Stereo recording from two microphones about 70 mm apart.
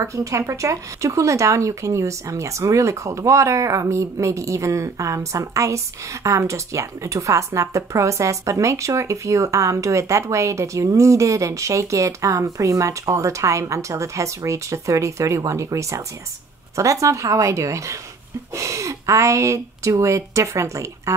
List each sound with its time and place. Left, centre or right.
0.0 s speech: right